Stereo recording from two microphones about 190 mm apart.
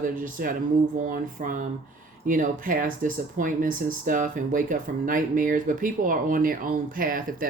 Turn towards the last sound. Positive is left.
turn(degrees=-45)  # may be behind; listen again after turning